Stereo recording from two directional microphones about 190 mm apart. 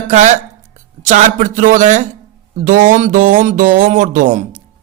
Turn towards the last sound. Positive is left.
turn(degrees=-45)  # may be behind; listen again after turning